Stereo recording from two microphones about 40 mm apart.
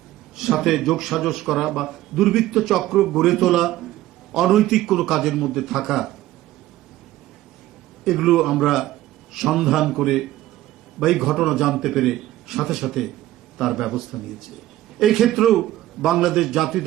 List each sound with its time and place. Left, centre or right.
0.3 s a man's voice: centre
8.0 s a man's voice: centre